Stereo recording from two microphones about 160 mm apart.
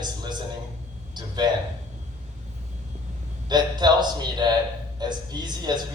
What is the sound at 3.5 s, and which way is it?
A man's voice, 25° right (ahead or behind).